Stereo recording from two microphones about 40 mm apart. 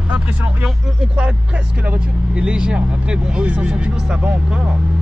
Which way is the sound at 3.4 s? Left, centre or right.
Right.